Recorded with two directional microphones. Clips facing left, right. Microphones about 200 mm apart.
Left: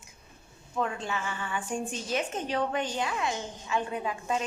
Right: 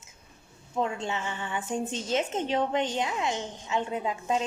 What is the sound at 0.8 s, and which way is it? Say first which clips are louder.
A woman's voice: right 2 dB; 25° right (ahead or behind).